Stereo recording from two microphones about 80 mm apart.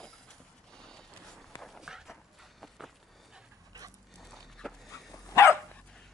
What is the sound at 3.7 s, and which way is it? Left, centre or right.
Dog, right.